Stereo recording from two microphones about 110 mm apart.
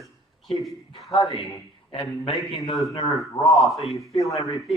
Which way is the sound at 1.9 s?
55° left (ahead or behind).